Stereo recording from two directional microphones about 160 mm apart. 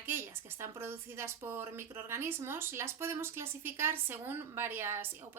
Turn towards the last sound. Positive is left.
turn(degrees=-15)  # may be behind; listen again after turning